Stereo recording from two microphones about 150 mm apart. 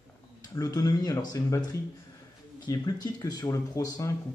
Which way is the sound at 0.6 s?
25° left (ahead or behind).